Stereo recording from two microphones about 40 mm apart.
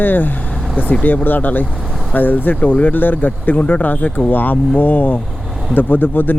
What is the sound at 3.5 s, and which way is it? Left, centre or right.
Speech, left.